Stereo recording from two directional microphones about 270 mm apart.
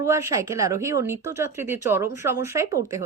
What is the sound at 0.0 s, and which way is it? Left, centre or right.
A woman's voice, centre.